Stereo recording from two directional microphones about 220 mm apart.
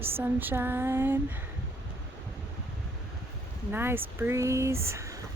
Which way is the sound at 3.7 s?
10° right (ahead or behind).